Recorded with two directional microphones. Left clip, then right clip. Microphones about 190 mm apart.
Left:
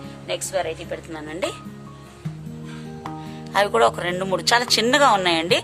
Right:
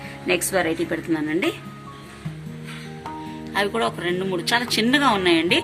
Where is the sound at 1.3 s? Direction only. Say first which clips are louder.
Right 1 dB; 35° left (ahead or behind).